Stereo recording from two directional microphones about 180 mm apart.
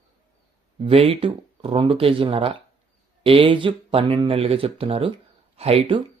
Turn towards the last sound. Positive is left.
turn(degrees=-30)  # may be behind; listen again after turning